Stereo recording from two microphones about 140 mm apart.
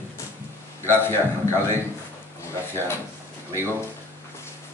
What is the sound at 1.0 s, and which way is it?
Speech, 15° left (ahead or behind).